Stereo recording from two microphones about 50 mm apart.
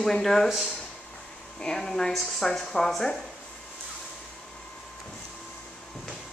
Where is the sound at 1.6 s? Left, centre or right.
Centre.